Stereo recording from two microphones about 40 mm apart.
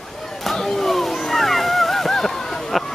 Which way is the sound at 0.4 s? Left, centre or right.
Centre.